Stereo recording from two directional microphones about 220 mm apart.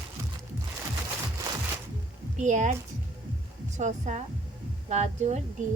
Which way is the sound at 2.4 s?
35° right (ahead or behind).